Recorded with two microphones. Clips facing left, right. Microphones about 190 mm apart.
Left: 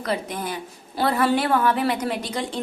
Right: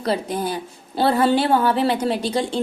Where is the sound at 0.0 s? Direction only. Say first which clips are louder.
Right 4 dB; 30° right (ahead or behind).